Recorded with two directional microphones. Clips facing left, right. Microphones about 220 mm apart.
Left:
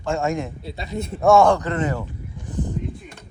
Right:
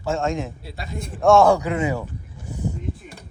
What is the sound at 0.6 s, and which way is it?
Speech, 25° left (ahead or behind).